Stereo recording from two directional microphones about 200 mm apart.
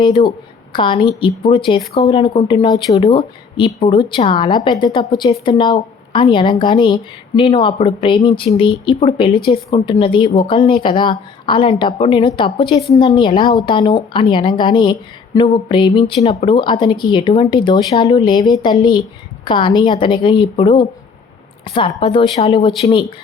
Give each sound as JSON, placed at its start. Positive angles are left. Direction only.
{"t": 0.0, "sound": "a woman's voice", "side_deg": 25}